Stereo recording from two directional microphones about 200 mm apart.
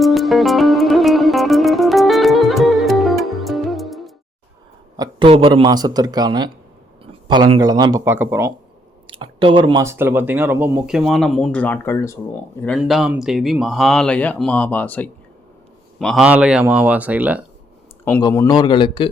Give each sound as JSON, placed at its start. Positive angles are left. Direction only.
{"t": 0.0, "sound": "music", "side_deg": 0}
{"t": 4.9, "sound": "speech", "side_deg": -25}
{"t": 9.0, "sound": "speech", "side_deg": -25}
{"t": 12.6, "sound": "speech", "side_deg": 0}
{"t": 18.0, "sound": "speech", "side_deg": 15}